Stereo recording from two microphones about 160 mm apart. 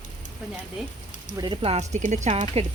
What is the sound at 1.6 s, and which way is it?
Speech, 40° right (ahead or behind).